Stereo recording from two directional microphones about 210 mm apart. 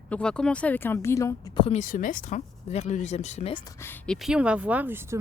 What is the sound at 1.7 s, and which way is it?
Speech, 35° left (ahead or behind).